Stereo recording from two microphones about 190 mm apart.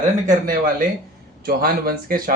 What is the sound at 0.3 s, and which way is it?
Speech, 45° right (ahead or behind).